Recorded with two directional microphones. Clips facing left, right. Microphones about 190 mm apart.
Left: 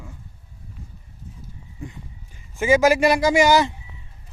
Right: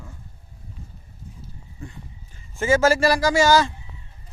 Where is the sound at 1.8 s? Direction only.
15° left (ahead or behind).